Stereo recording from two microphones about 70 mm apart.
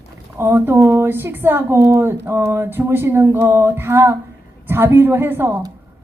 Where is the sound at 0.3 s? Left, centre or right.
Right.